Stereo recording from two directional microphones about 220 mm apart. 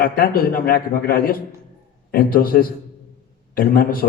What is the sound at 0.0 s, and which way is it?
A man's voice, 40° left (ahead or behind).